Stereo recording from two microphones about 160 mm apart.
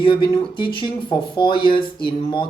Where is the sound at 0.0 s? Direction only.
30° left (ahead or behind).